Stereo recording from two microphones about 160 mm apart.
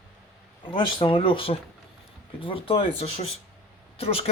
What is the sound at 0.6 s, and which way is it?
Speech, 30° left (ahead or behind).